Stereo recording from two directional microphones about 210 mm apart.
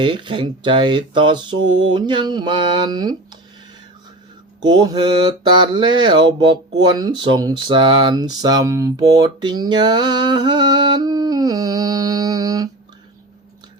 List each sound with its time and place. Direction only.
0.0 s mantra: 20° right (ahead or behind)
1.5 s a sound: 70° right (ahead or behind)
1.9 s mantra: 20° right (ahead or behind)
4.6 s mantra: 20° right (ahead or behind)
6.7 s speech: 20° right (ahead or behind)